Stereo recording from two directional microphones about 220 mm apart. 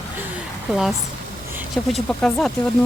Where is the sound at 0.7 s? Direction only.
Centre (ahead or behind).